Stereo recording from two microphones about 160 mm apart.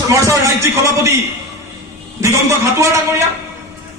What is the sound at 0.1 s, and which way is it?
Speech, 20° right (ahead or behind).